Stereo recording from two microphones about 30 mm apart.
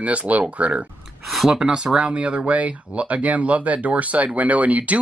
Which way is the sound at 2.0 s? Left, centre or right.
Right.